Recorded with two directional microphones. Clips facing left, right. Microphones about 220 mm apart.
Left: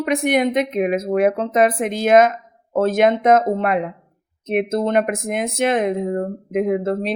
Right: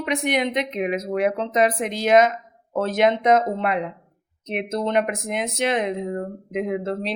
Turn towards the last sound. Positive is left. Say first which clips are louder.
# left 5 dB
turn(degrees=50)  # may be behind; listen again after turning